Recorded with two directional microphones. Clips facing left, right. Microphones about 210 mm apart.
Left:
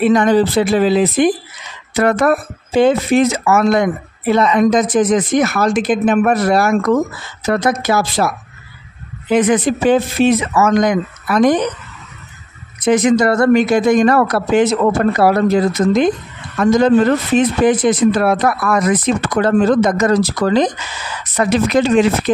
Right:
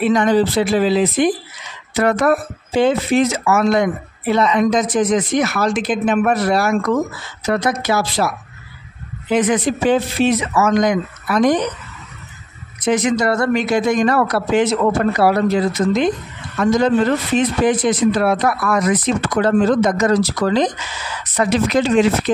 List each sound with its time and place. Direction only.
0.0 s speech: 50° left (ahead or behind)
9.3 s speech: 50° left (ahead or behind)
12.8 s speech: 50° left (ahead or behind)